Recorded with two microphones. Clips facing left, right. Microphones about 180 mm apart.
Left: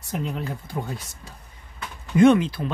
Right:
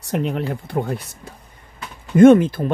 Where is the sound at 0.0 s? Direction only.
70° right (ahead or behind).